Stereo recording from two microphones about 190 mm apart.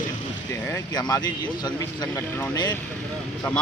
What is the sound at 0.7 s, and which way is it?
Speech, 20° left (ahead or behind).